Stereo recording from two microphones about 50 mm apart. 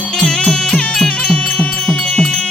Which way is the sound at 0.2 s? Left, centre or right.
Centre.